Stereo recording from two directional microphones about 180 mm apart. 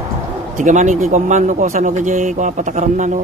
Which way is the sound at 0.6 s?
45° right (ahead or behind).